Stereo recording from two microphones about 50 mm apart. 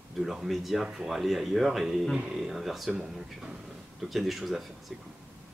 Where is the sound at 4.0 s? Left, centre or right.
Centre.